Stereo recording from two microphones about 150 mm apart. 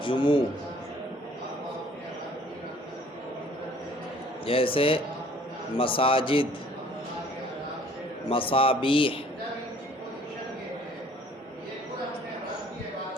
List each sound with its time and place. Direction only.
0.0 s speech: 30° left (ahead or behind)
4.4 s speech: 35° left (ahead or behind)
8.3 s speech: 35° left (ahead or behind)